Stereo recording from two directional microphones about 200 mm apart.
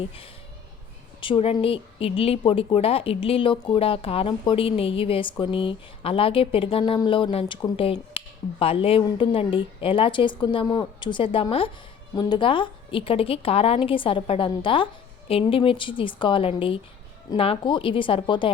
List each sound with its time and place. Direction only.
1.2 s speech: 25° left (ahead or behind)